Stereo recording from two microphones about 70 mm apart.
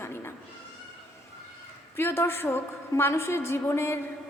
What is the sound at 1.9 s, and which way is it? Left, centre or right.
A woman's voice, left.